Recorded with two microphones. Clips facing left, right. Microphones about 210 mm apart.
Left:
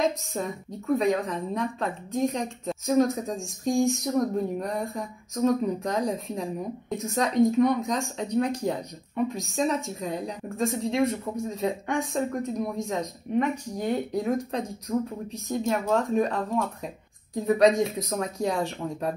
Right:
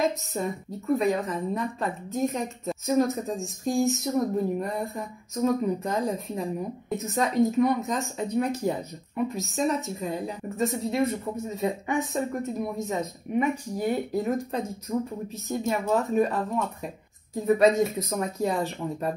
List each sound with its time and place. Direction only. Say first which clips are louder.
0.0 s a woman's voice: even; centre (ahead or behind)